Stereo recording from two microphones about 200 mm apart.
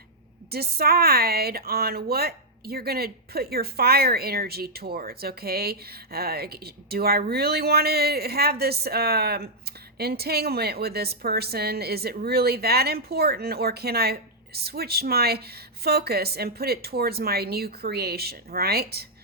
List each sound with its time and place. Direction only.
0.5 s speech: 50° right (ahead or behind)